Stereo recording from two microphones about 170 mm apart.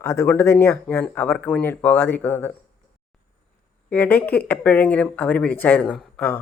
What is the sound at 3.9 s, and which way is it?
Speech, 10° left (ahead or behind).